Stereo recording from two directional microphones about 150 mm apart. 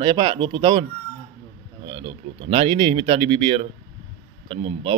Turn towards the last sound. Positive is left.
turn(degrees=-40)  # may be behind; listen again after turning